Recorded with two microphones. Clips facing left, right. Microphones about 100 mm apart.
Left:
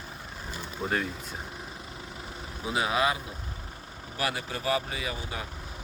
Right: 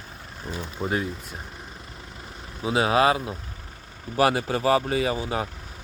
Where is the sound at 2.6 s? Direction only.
25° right (ahead or behind).